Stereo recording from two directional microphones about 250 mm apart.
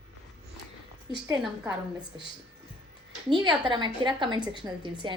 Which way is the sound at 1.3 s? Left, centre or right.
Centre.